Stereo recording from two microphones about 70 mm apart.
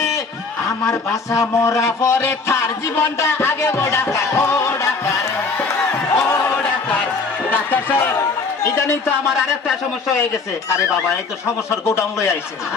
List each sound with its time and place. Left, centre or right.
0.9 s speech: left
5.9 s a sound: left
6.6 s a sound: left
7.5 s speech: left
8.6 s a man's voice: left
11.7 s speech: left